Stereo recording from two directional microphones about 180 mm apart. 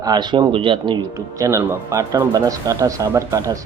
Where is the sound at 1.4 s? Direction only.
15° right (ahead or behind).